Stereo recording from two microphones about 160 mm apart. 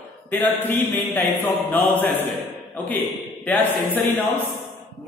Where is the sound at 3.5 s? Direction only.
10° left (ahead or behind).